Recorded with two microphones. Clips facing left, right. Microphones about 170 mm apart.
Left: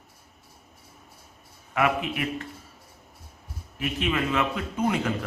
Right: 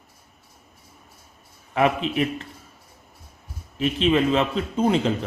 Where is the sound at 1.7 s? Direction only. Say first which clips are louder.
Right 4 dB; 30° right (ahead or behind).